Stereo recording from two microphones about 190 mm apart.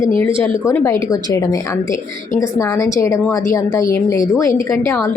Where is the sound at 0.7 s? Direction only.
15° left (ahead or behind).